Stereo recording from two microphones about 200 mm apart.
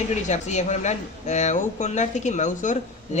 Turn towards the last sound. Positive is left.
turn(degrees=40)  # may be behind; listen again after turning